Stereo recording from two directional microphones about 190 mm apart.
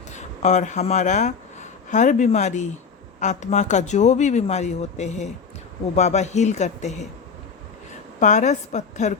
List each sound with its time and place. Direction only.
0.2 s speech: 40° left (ahead or behind)
8.2 s speech: 40° left (ahead or behind)